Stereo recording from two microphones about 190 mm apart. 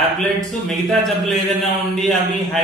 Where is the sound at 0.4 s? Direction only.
Centre (ahead or behind).